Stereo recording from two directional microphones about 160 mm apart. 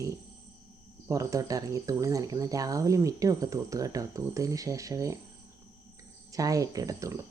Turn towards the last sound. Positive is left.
turn(degrees=-20)  # may be behind; listen again after turning